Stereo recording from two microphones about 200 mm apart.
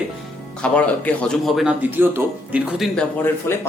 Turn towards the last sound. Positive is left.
turn(degrees=10)  # may be behind; listen again after turning